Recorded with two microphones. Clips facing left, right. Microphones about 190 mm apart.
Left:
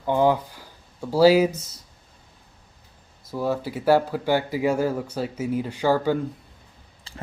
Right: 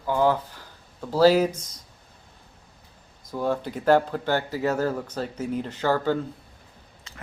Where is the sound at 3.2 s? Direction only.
5° left (ahead or behind).